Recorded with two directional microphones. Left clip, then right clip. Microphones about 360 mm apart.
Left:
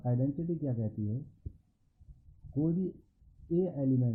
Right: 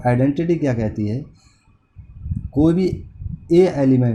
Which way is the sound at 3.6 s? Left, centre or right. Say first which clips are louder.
Right 19 dB; centre.